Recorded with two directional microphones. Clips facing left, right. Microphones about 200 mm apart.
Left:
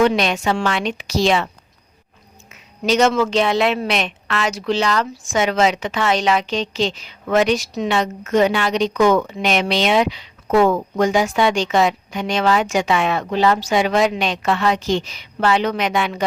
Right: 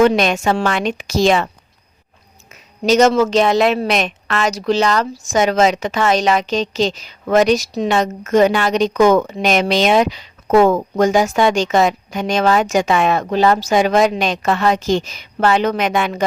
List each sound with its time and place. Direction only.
0.0 s a woman's voice: 45° right (ahead or behind)
2.5 s a woman's voice: 40° right (ahead or behind)